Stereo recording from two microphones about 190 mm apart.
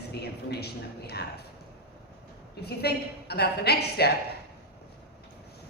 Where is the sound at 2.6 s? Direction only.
60° left (ahead or behind).